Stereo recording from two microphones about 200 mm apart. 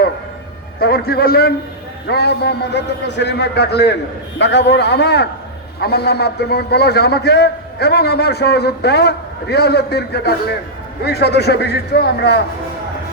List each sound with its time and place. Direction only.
0.8 s a man's voice: 50° left (ahead or behind)